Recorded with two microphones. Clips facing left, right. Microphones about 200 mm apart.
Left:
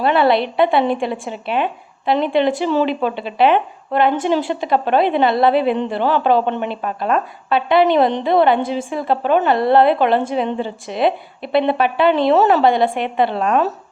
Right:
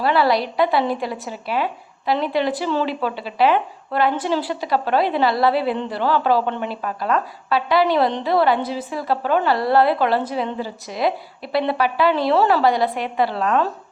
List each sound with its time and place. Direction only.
0.0 s a woman's voice: 25° left (ahead or behind)